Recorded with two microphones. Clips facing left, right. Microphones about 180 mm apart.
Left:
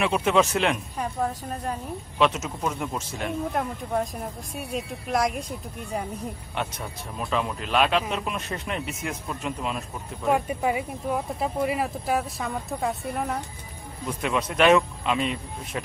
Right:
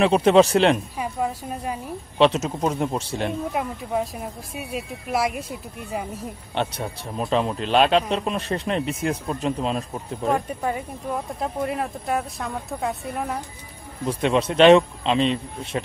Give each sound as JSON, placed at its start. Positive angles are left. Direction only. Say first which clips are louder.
{"t": 0.0, "sound": "speech", "louder": "right 6 dB", "side_deg": -35}
{"t": 0.9, "sound": "a woman's voice", "louder": "right 2 dB", "side_deg": -10}
{"t": 2.1, "sound": "speech", "louder": "right 5 dB", "side_deg": -30}
{"t": 3.5, "sound": "speech", "louder": "right 1 dB", "side_deg": -5}
{"t": 6.5, "sound": "speech", "louder": "right 8 dB", "side_deg": -30}
{"t": 10.3, "sound": "speech", "louder": "left 2 dB", "side_deg": 5}
{"t": 14.0, "sound": "speech", "louder": "right 6 dB", "side_deg": -30}